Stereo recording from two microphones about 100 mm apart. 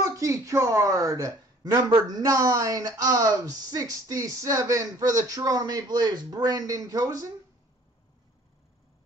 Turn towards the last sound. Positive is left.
turn(degrees=-35)  # may be behind; listen again after turning